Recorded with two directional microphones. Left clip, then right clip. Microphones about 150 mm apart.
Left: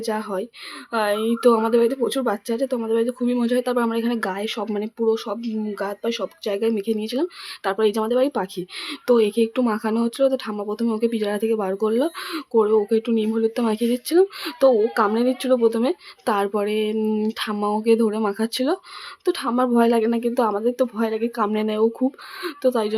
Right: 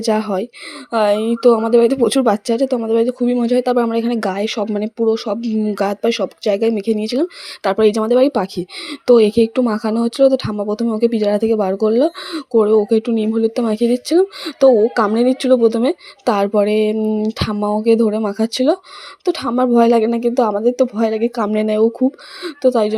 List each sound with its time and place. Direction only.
0.0 s speech: 35° right (ahead or behind); by 1.9 s 20° right (ahead or behind)
1.9 s speech: 40° right (ahead or behind)
5.7 s speech: 45° right (ahead or behind); by 17.0 s 25° right (ahead or behind)
17.0 s speech: 10° right (ahead or behind)